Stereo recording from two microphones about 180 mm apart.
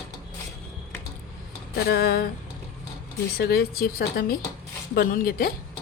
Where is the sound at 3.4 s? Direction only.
60° left (ahead or behind).